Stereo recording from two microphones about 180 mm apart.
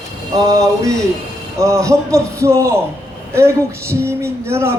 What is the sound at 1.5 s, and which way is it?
A man's voice, 15° right (ahead or behind).